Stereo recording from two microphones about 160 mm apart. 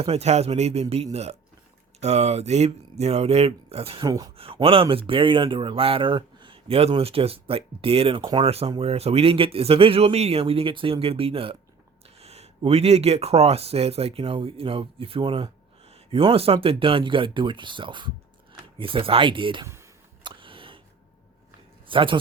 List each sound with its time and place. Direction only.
0.0 s speech: 40° right (ahead or behind)
4.0 s speech: 25° right (ahead or behind)
4.4 s speech: 35° right (ahead or behind)
20.2 s a sound: 30° right (ahead or behind)
21.8 s speech: 30° right (ahead or behind)